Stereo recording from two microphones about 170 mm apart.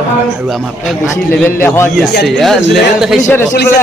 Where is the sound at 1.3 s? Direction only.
15° left (ahead or behind).